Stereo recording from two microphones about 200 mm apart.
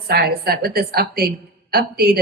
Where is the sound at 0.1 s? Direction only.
50° right (ahead or behind).